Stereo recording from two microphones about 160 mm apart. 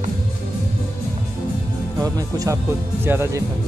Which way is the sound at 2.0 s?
20° right (ahead or behind).